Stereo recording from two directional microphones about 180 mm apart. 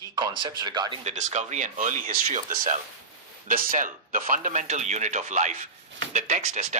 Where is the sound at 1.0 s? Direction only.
40° right (ahead or behind).